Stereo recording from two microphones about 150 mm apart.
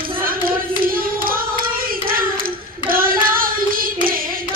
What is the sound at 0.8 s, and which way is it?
Hands, 75° right (ahead or behind).